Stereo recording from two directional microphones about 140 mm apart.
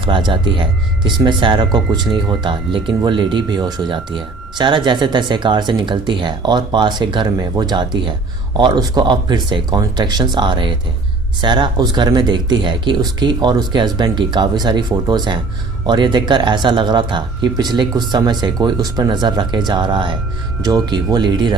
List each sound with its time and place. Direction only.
0.0 s speech: 35° right (ahead or behind)